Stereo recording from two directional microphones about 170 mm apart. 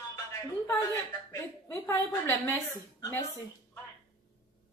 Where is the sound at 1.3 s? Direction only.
20° left (ahead or behind).